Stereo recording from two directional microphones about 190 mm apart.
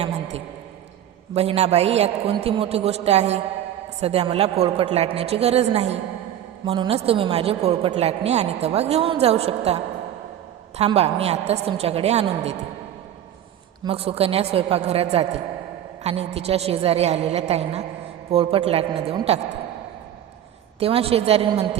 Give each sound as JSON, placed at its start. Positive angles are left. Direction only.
{"t": 0.0, "sound": "a sound", "side_deg": -35}
{"t": 1.3, "sound": "a woman's voice", "side_deg": -35}
{"t": 13.8, "sound": "a woman's voice", "side_deg": -30}
{"t": 20.7, "sound": "a woman's voice", "side_deg": -30}